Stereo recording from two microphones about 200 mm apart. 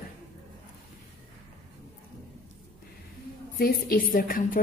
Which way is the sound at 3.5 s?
50° left (ahead or behind).